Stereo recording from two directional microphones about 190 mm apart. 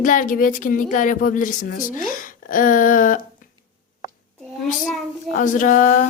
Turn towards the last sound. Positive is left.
turn(degrees=40)  # may be behind; listen again after turning